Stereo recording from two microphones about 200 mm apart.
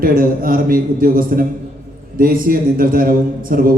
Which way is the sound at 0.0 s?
45° right (ahead or behind).